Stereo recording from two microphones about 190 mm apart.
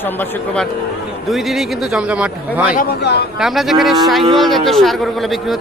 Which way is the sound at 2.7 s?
60° left (ahead or behind).